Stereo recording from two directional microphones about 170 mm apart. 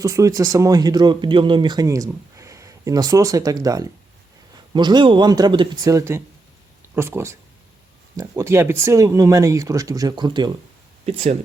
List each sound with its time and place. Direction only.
0.0 s speech: 20° right (ahead or behind)
11.0 s speech: 40° right (ahead or behind)